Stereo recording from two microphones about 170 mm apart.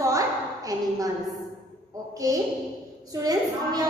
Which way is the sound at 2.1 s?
20° right (ahead or behind).